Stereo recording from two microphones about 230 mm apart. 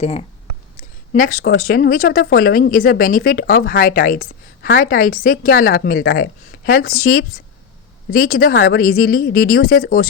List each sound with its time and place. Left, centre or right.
0.0 s speech: left
1.1 s speech: left